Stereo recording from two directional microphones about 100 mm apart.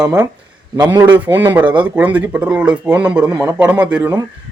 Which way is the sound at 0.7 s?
40° right (ahead or behind).